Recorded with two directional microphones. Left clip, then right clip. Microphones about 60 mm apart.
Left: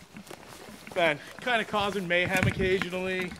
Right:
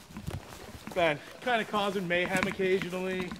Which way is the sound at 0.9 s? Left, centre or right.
Left.